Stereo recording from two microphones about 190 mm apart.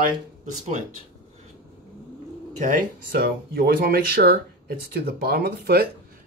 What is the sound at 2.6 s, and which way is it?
Speech, 45° right (ahead or behind).